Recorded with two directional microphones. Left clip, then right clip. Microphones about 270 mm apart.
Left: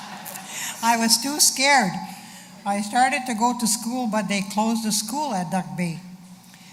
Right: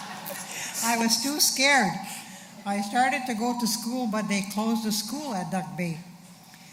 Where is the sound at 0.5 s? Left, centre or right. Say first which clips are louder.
Left 6 dB; centre.